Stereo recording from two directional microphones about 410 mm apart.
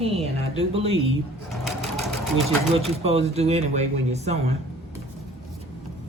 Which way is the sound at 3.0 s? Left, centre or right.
Centre.